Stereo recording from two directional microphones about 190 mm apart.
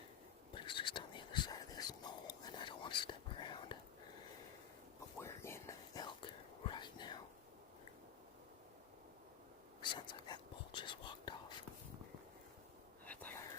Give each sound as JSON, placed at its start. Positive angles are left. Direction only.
{"t": 0.5, "sound": "whispering", "side_deg": 25}
{"t": 5.2, "sound": "whispering", "side_deg": 15}
{"t": 9.8, "sound": "whispering", "side_deg": 25}
{"t": 13.1, "sound": "whispering", "side_deg": 10}